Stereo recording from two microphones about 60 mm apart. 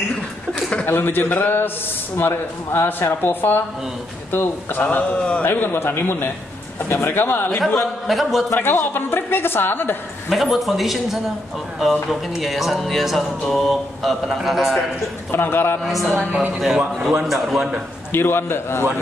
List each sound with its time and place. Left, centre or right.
0.6 s chuckle: centre
0.8 s speech: left
5.1 s a man's voice: centre
5.4 s speech: left
8.1 s speech: centre
8.5 s speech: left
10.3 s speech: centre
15.3 s speech: left
15.8 s speech: centre
18.1 s speech: left